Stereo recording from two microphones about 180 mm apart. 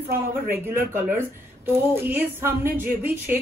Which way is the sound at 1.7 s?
10° right (ahead or behind).